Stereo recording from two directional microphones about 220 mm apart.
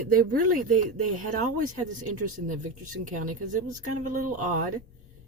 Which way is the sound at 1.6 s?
85° right.